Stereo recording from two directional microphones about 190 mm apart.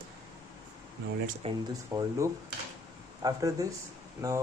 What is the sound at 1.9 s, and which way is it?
Speech, 15° right (ahead or behind).